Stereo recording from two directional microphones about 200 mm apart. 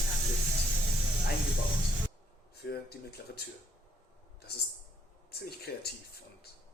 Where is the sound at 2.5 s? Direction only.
50° left (ahead or behind).